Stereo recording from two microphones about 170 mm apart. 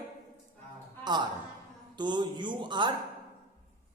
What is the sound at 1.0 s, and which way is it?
A man's voice, 25° right (ahead or behind).